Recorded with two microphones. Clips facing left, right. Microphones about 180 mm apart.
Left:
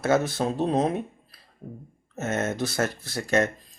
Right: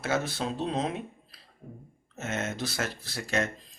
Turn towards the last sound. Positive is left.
turn(degrees=45)  # may be behind; listen again after turning